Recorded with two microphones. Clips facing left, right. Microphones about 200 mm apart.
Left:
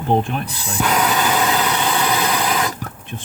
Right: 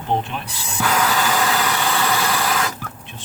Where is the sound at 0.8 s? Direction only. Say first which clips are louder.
Left 2 dB; 20° left (ahead or behind).